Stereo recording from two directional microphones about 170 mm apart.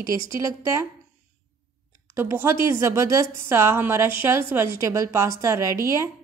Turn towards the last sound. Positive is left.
turn(degrees=-20)  # may be behind; listen again after turning